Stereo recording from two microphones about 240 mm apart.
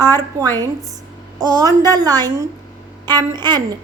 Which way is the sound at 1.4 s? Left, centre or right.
Centre.